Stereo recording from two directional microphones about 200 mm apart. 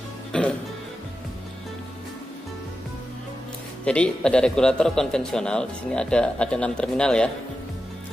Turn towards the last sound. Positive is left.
turn(degrees=5)  # may be behind; listen again after turning